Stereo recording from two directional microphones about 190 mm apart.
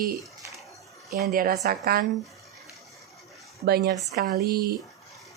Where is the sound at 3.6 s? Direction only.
55° right (ahead or behind).